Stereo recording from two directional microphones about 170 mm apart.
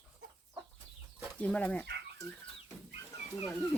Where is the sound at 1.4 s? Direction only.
5° left (ahead or behind).